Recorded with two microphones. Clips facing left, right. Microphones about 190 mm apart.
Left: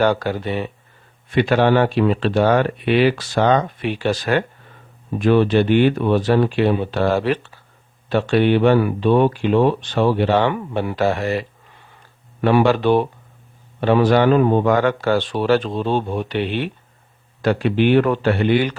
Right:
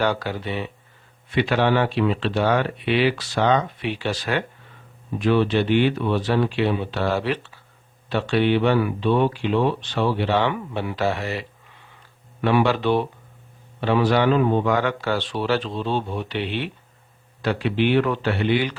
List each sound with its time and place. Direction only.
0.0 s speech: 50° left (ahead or behind)